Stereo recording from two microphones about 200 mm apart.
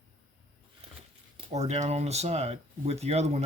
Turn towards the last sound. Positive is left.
turn(degrees=-35)  # may be behind; listen again after turning